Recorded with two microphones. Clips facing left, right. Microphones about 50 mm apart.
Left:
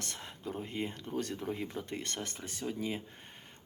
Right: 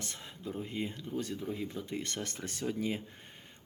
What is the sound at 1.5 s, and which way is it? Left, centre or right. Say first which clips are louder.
Speech: even; left.